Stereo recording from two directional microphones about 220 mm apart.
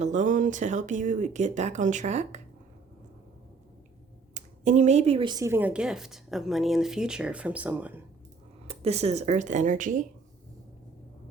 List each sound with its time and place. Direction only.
0.0 s speech: 35° right (ahead or behind)
4.4 s speech: 35° right (ahead or behind); by 8.0 s 5° right (ahead or behind)
8.6 s speech: 25° right (ahead or behind)